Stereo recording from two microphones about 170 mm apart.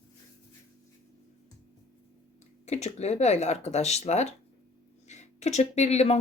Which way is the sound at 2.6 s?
40° left (ahead or behind).